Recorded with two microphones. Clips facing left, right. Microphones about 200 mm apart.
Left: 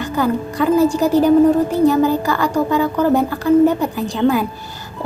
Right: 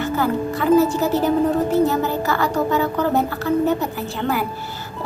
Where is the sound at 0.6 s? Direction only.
10° left (ahead or behind).